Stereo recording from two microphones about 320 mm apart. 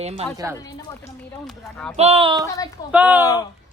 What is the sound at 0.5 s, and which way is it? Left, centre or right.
Speech, centre.